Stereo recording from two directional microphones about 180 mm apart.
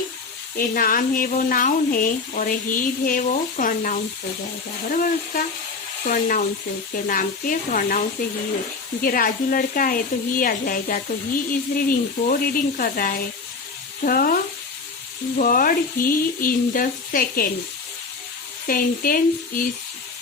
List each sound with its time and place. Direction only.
0.5 s speech: 50° left (ahead or behind)
9.0 s speech: 50° left (ahead or behind)
15.4 s speech: 50° left (ahead or behind)
18.7 s speech: 50° left (ahead or behind)